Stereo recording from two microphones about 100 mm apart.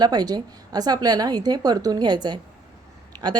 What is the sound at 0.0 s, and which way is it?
A woman's voice, 45° right (ahead or behind).